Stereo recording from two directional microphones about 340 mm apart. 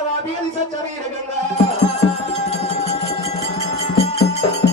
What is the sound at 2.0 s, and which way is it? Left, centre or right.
Music, centre.